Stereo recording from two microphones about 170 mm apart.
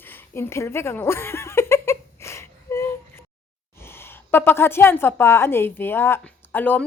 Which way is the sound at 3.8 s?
15° left (ahead or behind).